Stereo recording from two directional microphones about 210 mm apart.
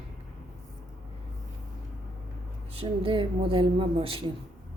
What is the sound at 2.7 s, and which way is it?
A man's voice, 25° right (ahead or behind).